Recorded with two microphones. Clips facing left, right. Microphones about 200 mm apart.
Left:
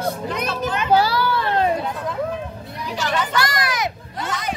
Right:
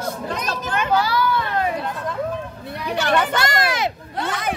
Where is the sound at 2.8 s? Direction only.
65° right (ahead or behind).